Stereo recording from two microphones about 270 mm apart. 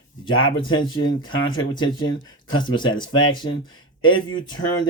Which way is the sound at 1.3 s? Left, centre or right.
Left.